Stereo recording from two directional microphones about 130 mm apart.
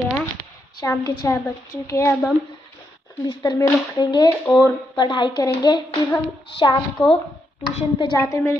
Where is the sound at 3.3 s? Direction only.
35° left (ahead or behind).